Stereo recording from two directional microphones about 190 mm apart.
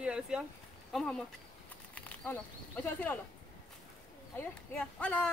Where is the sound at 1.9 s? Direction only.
10° left (ahead or behind).